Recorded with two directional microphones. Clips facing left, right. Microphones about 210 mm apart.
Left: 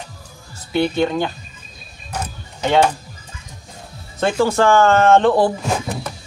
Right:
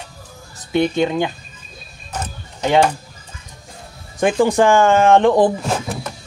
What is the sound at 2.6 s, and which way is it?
Speech, 10° right (ahead or behind).